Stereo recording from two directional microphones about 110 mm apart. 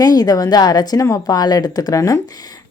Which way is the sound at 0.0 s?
35° left (ahead or behind).